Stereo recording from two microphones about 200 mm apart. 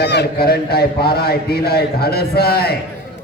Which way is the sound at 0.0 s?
55° left (ahead or behind).